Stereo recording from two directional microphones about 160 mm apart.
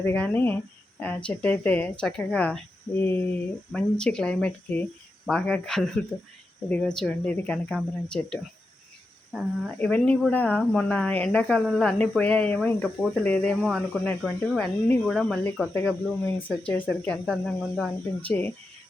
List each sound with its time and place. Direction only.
0.0 s a woman's voice: 10° left (ahead or behind)
9.7 s a woman's voice: 10° left (ahead or behind)